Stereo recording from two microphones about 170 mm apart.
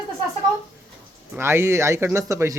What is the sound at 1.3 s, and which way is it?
A man's voice, 15° right (ahead or behind).